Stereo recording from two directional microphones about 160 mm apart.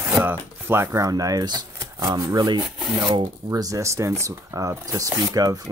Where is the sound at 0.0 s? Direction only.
10° right (ahead or behind).